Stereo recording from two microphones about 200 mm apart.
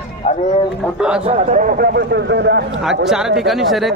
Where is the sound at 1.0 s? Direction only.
5° right (ahead or behind).